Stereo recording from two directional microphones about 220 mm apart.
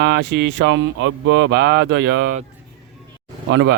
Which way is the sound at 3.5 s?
55° right (ahead or behind).